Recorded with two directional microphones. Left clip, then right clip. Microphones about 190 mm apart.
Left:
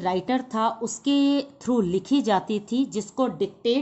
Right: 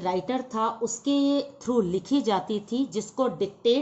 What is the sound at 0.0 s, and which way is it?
A woman's voice, 35° left (ahead or behind).